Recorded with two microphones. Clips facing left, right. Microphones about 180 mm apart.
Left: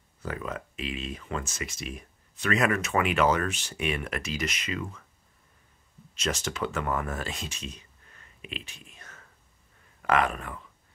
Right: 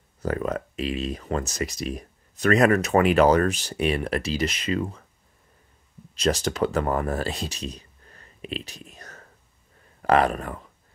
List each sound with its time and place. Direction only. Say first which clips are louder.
0.2 s speech: right 8 dB; 40° right (ahead or behind)
6.1 s speech: right 8 dB; 35° right (ahead or behind)